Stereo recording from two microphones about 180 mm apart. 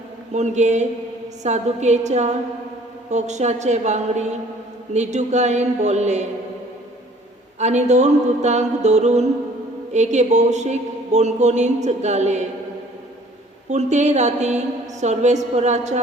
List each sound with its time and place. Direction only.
0.3 s a man's voice: 40° right (ahead or behind)
7.6 s a man's voice: 40° right (ahead or behind)
13.7 s a man's voice: 40° right (ahead or behind)